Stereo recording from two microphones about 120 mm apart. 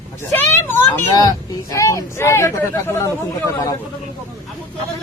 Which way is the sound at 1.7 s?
25° left (ahead or behind).